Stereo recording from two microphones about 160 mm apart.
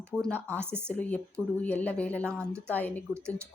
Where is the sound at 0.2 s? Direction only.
10° left (ahead or behind).